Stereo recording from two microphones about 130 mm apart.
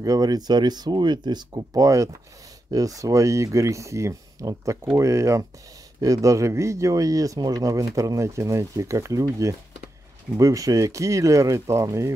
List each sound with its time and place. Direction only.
0.0 s speech: 30° right (ahead or behind)